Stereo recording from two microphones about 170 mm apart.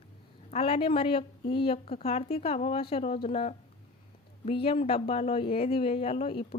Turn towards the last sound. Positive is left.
turn(degrees=35)  # may be behind; listen again after turning